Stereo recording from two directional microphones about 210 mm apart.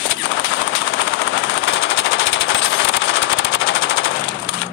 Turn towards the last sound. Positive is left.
turn(degrees=65)  # may be behind; listen again after turning